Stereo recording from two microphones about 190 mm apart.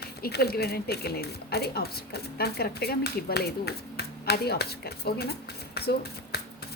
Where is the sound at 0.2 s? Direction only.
55° left (ahead or behind).